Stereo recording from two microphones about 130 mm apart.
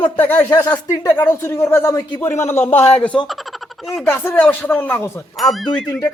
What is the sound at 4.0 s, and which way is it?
Speech, 15° left (ahead or behind).